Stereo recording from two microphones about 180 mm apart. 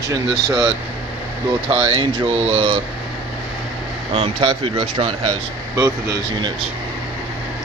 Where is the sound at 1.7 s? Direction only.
25° right (ahead or behind).